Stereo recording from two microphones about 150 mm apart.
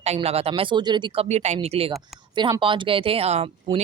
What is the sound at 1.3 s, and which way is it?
Speech, 45° right (ahead or behind).